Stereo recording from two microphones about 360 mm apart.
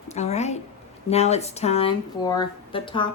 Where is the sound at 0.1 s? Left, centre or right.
Centre.